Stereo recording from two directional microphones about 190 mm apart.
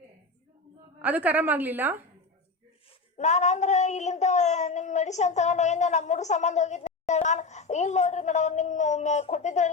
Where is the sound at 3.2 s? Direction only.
35° left (ahead or behind).